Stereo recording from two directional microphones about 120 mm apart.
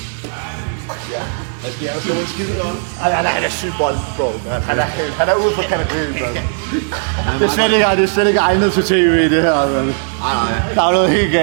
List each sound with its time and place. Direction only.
2.1 s a man's voice: 15° right (ahead or behind)